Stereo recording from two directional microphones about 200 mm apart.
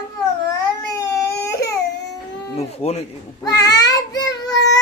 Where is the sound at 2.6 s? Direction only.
30° left (ahead or behind).